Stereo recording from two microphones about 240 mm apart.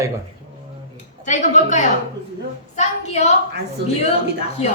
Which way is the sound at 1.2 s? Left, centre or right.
Left.